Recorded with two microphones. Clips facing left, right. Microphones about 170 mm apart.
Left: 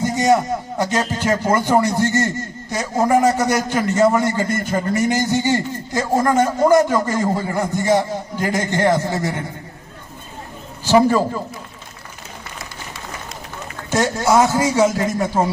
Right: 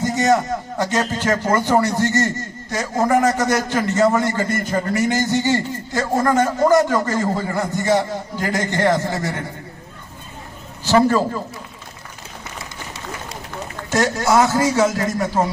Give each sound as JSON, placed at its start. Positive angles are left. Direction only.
{"t": 0.0, "sound": "a man's voice", "side_deg": 15}
{"t": 10.8, "sound": "a man's voice", "side_deg": 15}
{"t": 13.9, "sound": "a man's voice", "side_deg": 20}